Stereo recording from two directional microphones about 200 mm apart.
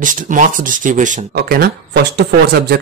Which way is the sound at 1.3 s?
50° right (ahead or behind).